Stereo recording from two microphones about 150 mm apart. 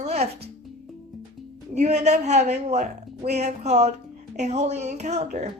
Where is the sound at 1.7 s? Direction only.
50° right (ahead or behind).